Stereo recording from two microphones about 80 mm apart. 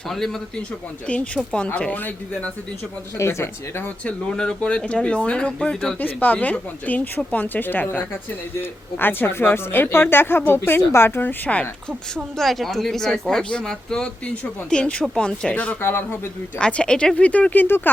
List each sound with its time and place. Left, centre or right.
0.1 s speech: centre
1.0 s speech: centre
3.2 s speech: left
3.8 s speech: centre
6.0 s speech: left
11.9 s speech: centre; by 16.0 s left
16.6 s speech: centre